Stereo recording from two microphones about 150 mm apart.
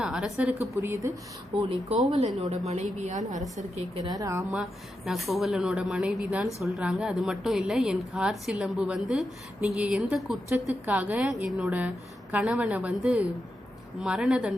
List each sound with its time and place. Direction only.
0.0 s a woman's voice: 5° right (ahead or behind)
1.5 s a woman's voice: 35° right (ahead or behind); by 3.4 s 55° right (ahead or behind)
4.0 s a woman's voice: 25° right (ahead or behind)
4.5 s a woman's voice: centre (ahead or behind)